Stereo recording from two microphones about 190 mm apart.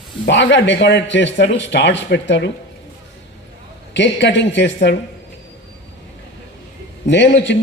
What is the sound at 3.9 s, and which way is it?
Speech, 70° left (ahead or behind).